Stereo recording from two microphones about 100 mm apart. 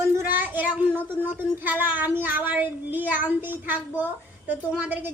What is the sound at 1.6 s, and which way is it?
A woman's voice, 15° right (ahead or behind).